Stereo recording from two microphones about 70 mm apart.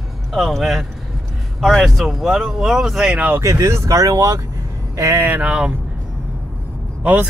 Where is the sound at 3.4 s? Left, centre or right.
Right.